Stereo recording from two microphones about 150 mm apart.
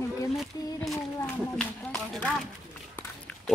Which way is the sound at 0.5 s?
20° left (ahead or behind).